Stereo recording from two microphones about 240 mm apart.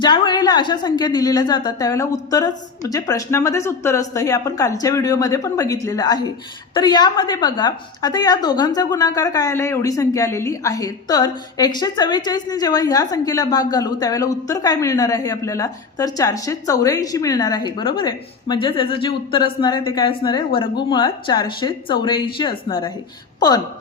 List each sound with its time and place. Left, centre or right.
0.0 s a woman's voice: centre